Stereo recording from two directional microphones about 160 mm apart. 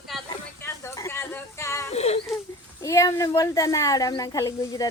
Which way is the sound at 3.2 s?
20° left (ahead or behind).